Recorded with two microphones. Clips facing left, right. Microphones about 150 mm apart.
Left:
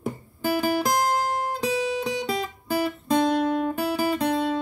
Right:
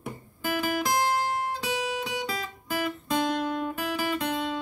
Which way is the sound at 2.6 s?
40° left (ahead or behind).